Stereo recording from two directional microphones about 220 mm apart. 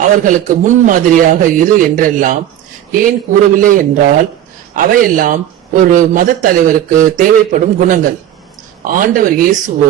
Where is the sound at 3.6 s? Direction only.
35° right (ahead or behind).